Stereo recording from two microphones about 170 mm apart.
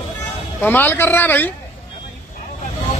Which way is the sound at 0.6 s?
10° left (ahead or behind).